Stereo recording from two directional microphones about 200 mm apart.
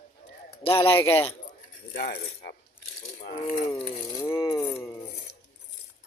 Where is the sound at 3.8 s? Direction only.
30° left (ahead or behind).